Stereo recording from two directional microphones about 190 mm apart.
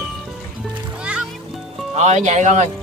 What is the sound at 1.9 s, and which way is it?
Speech, 35° right (ahead or behind).